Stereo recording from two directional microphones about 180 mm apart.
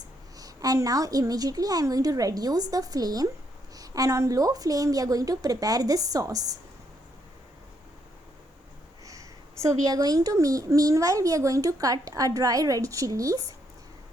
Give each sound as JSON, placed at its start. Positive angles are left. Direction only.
{"t": 0.3, "sound": "a child's voice", "side_deg": -20}
{"t": 9.0, "sound": "a child's voice", "side_deg": -20}